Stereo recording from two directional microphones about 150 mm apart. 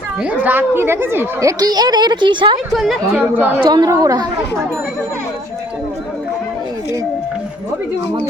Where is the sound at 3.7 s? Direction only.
25° right (ahead or behind).